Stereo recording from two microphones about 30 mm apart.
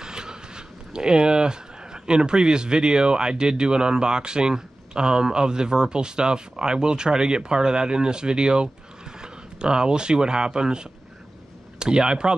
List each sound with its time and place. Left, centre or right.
0.0 s speech: right